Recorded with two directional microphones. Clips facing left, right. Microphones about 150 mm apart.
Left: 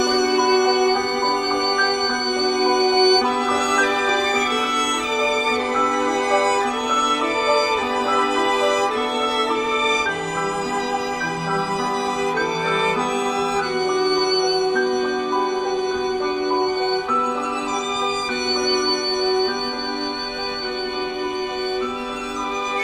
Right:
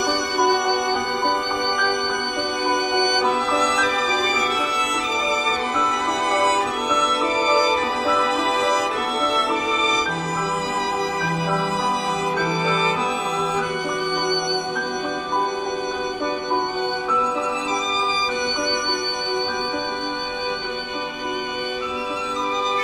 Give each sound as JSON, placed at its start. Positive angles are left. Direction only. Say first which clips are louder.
{"t": 0.4, "sound": "music", "louder": "even", "side_deg": 0}
{"t": 2.7, "sound": "music", "louder": "left 5 dB", "side_deg": 25}